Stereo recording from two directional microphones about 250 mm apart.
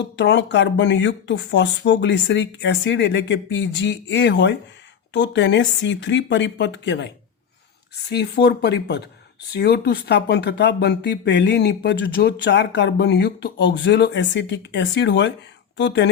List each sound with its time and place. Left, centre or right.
0.0 s speech: left
8.1 s speech: left